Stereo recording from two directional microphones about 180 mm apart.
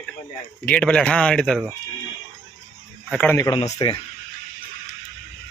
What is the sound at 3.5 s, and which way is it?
Speech, 25° left (ahead or behind).